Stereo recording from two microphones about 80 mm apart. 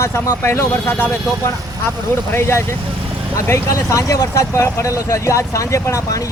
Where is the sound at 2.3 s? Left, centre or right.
Left.